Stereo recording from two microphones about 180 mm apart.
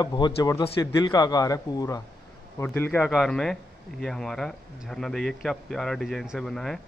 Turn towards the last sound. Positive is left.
turn(degrees=0)  # may be behind; listen again after turning